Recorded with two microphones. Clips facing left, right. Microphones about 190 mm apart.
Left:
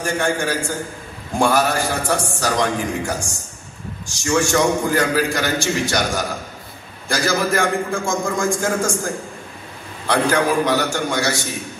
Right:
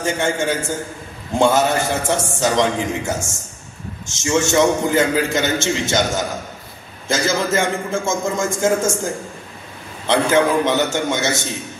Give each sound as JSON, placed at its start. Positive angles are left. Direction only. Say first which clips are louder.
{"t": 0.0, "sound": "a man's voice", "louder": "right 1 dB", "side_deg": -20}
{"t": 10.0, "sound": "a man's voice", "louder": "right 2 dB", "side_deg": -20}